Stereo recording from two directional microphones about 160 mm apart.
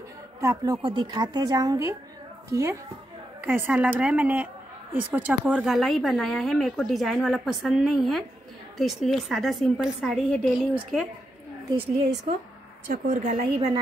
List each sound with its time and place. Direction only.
0.4 s speech: 20° right (ahead or behind)
0.8 s a woman's voice: 30° right (ahead or behind); by 10.7 s centre (ahead or behind)
12.8 s a woman's voice: 60° right (ahead or behind); by 13.7 s 45° right (ahead or behind)